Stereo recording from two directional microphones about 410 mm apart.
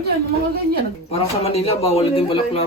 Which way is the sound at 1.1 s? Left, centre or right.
Centre.